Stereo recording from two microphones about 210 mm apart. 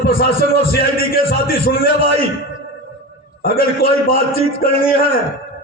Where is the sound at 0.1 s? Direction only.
45° left (ahead or behind).